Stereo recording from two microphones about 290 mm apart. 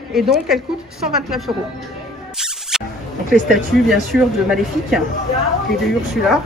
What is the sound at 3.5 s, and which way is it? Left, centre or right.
Speech, centre.